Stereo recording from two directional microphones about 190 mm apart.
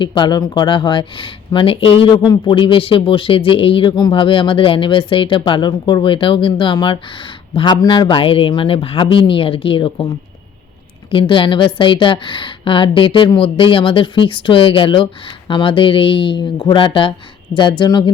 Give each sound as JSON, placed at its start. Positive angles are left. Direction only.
{"t": 0.0, "sound": "speech", "side_deg": 25}